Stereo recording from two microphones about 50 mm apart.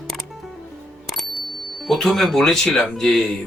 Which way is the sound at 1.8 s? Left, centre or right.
Centre.